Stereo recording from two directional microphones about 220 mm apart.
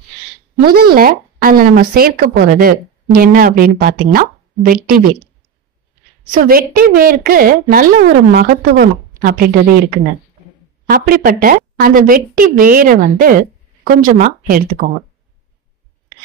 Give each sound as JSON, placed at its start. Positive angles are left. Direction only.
{"t": 0.7, "sound": "speech", "side_deg": -45}
{"t": 6.3, "sound": "speech", "side_deg": -40}
{"t": 10.9, "sound": "speech", "side_deg": -40}